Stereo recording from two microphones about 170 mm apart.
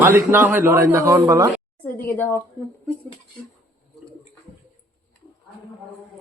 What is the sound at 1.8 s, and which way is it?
Speech, 10° left (ahead or behind).